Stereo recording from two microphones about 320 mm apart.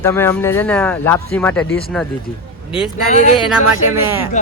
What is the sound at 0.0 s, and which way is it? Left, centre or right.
Speech, centre.